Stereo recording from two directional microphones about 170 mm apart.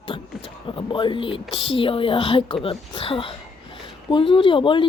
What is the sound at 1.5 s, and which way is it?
Speech, 30° left (ahead or behind).